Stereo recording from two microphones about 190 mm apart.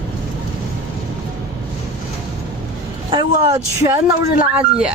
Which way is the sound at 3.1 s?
25° right (ahead or behind).